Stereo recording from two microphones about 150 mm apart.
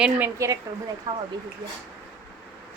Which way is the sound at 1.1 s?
25° right (ahead or behind).